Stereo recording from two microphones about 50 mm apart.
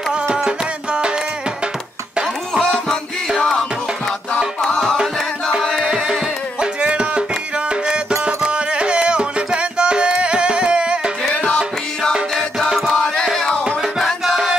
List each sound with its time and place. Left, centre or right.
0.1 s music: centre
2.6 s music: centre
5.9 s music: centre
6.6 s music: right
11.2 s music: centre
12.5 s music: centre
13.9 s music: centre